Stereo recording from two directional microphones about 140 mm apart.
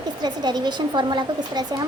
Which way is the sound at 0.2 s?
30° right (ahead or behind).